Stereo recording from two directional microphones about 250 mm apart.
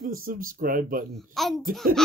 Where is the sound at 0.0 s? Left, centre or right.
Right.